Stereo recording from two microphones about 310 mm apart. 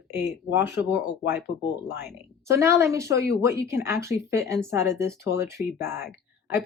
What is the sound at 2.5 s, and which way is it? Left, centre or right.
Speech, centre.